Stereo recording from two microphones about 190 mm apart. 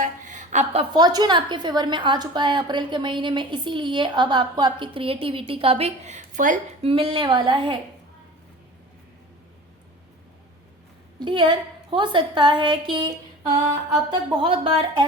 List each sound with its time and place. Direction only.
0.0 s a sound: 40° right (ahead or behind)
0.9 s a woman's voice: 20° right (ahead or behind); by 6.6 s 40° right (ahead or behind)
6.8 s a woman's voice: 30° right (ahead or behind)
11.2 s a woman's voice: 25° right (ahead or behind)
14.1 s a woman's voice: 25° right (ahead or behind)